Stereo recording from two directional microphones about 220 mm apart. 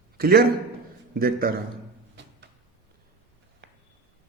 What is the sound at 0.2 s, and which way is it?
A man's voice, 45° right (ahead or behind).